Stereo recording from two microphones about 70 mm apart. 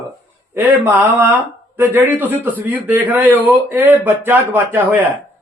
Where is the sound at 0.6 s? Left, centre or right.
Right.